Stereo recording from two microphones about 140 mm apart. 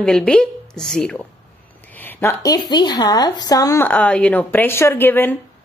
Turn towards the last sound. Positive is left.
turn(degrees=15)  # may be behind; listen again after turning